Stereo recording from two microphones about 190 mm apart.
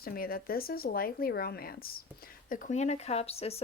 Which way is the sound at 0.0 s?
50° left (ahead or behind).